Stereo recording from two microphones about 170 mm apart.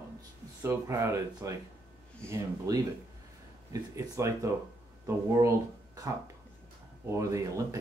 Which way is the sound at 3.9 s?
20° right (ahead or behind).